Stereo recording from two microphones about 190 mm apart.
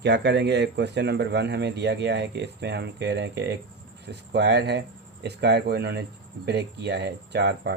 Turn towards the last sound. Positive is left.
turn(degrees=-60)  # may be behind; listen again after turning